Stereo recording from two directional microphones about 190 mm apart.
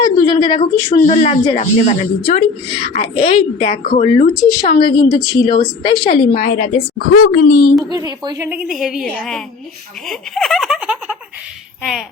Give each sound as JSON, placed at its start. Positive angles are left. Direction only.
{"t": 0.0, "sound": "a sound", "side_deg": 20}
{"t": 1.0, "sound": "speech", "side_deg": 35}
{"t": 2.6, "sound": "speech", "side_deg": 30}
{"t": 6.3, "sound": "speech", "side_deg": 45}
{"t": 8.2, "sound": "a woman's voice", "side_deg": -20}
{"t": 8.4, "sound": "a woman's voice", "side_deg": -5}